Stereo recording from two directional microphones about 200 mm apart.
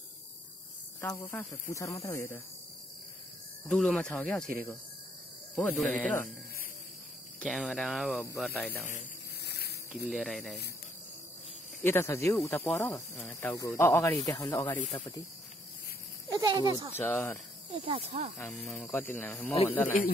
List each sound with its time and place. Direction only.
1.3 s speech: 15° left (ahead or behind)
3.6 s speech: 5° left (ahead or behind)
5.6 s speech: 5° left (ahead or behind)
7.3 s speech: centre (ahead or behind)
9.4 s a sound: 55° left (ahead or behind)
9.9 s speech: centre (ahead or behind)
11.8 s speech: 10° left (ahead or behind)
14.8 s speech: 35° left (ahead or behind)
16.3 s speech: 20° right (ahead or behind)
16.9 s speech: 10° left (ahead or behind)
17.8 s speech: 30° right (ahead or behind)
18.4 s speech: 5° left (ahead or behind)
19.4 s a man's voice: 30° left (ahead or behind)